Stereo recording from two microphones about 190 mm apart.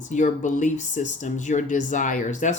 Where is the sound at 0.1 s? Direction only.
40° left (ahead or behind).